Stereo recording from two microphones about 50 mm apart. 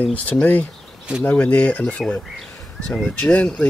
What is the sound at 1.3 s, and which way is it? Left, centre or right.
Speech, left.